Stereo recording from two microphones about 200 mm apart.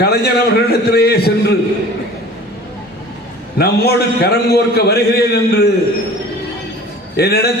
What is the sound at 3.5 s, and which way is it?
A man's voice, 55° left (ahead or behind).